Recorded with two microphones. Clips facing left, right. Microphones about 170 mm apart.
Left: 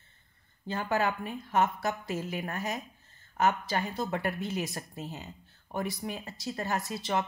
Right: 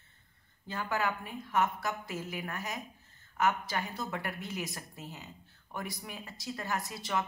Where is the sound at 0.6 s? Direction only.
30° left (ahead or behind).